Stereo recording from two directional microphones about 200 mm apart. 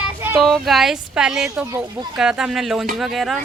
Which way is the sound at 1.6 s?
15° right (ahead or behind).